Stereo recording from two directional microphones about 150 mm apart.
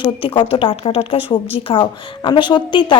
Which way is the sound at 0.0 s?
35° left (ahead or behind).